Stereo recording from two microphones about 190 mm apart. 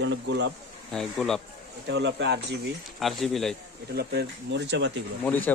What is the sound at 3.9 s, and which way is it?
Speech, 60° right (ahead or behind).